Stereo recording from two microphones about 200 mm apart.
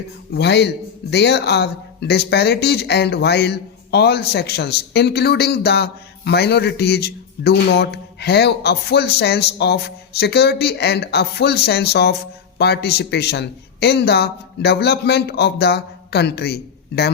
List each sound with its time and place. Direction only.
0.3 s speech: 55° left (ahead or behind)